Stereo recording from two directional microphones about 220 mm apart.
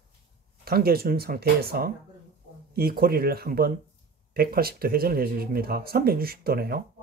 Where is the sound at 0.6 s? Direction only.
45° right (ahead or behind).